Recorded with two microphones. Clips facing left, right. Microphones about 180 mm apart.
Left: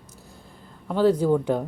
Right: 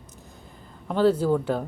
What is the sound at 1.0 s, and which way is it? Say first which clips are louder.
Speech: left 1 dB; 15° left (ahead or behind).